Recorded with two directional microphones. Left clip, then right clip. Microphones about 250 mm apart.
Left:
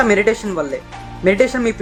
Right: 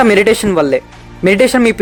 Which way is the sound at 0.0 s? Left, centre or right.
Right.